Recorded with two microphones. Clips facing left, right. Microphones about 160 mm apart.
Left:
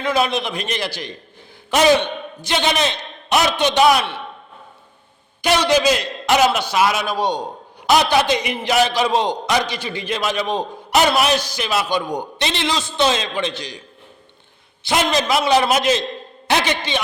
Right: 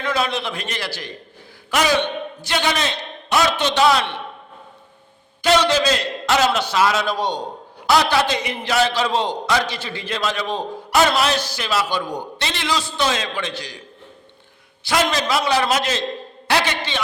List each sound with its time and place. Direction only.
0.0 s a man's voice: 15° left (ahead or behind)
5.4 s a man's voice: 15° left (ahead or behind)
14.8 s a man's voice: 20° left (ahead or behind)